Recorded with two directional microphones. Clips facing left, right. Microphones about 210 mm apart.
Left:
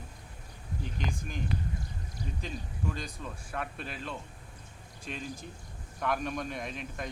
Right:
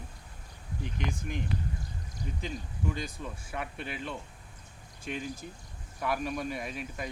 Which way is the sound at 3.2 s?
15° right (ahead or behind).